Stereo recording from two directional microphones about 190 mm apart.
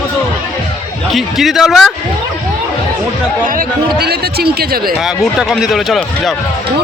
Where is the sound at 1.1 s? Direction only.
Centre (ahead or behind).